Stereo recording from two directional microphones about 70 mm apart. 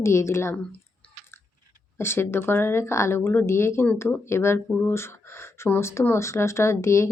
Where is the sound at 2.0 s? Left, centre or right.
Left.